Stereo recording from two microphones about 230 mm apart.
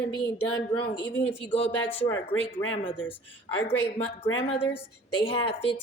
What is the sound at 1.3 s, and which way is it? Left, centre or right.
Speech, left.